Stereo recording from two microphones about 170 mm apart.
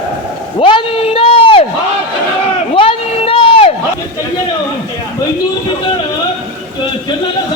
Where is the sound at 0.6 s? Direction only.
30° left (ahead or behind).